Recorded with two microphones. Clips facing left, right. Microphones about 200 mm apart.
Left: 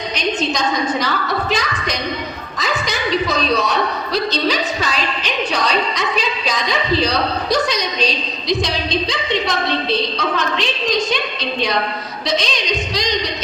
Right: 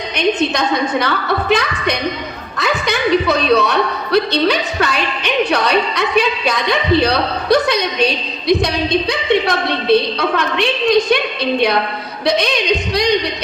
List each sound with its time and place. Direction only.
0.2 s a woman's voice: 60° right (ahead or behind)
12.2 s a woman's voice: 60° right (ahead or behind)